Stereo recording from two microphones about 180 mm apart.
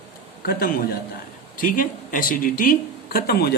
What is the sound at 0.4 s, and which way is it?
Speech, 60° left (ahead or behind).